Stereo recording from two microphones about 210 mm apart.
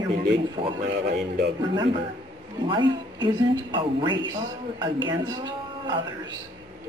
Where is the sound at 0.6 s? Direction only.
25° right (ahead or behind).